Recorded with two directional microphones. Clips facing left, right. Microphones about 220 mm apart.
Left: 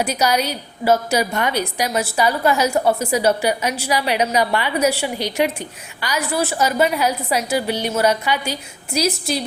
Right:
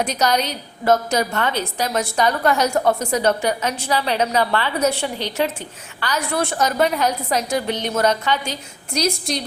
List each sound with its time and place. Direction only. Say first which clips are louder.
0.0 s a woman's voice: left 1 dB; 10° left (ahead or behind)